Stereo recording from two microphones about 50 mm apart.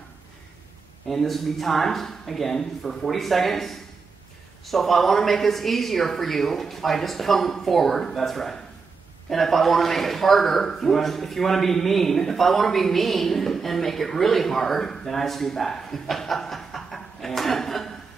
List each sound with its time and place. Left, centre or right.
1.0 s speech: centre